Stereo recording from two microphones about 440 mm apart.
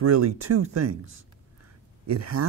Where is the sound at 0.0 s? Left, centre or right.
Right.